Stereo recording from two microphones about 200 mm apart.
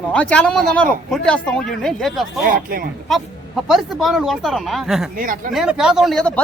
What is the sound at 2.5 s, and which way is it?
Speech, 45° right (ahead or behind).